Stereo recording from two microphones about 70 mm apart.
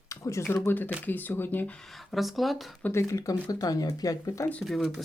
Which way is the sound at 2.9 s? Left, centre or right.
Left.